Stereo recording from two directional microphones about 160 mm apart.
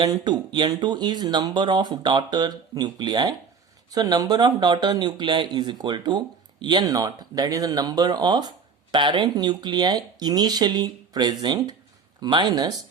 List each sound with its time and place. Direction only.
0.0 s speech: 25° right (ahead or behind)